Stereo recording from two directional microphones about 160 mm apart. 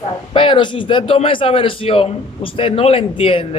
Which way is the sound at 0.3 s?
30° left (ahead or behind).